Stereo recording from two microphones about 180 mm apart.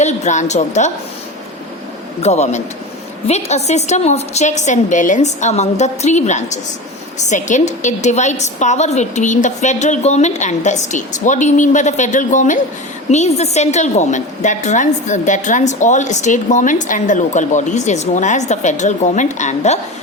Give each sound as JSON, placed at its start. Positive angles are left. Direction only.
{"t": 0.0, "sound": "a woman's voice", "side_deg": 40}
{"t": 2.2, "sound": "a woman's voice", "side_deg": 40}